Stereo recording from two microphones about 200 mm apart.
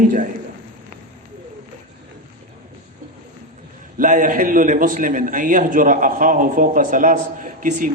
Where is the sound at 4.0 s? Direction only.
40° right (ahead or behind).